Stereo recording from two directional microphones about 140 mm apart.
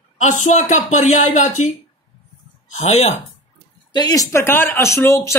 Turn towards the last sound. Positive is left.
turn(degrees=20)  # may be behind; listen again after turning